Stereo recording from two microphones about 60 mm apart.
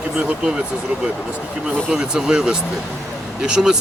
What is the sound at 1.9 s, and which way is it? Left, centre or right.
Speech, centre.